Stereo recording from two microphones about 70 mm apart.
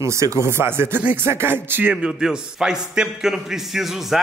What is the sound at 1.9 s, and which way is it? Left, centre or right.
A man's voice, centre.